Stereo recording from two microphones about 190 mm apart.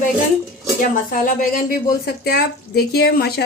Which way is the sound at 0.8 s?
45° left (ahead or behind).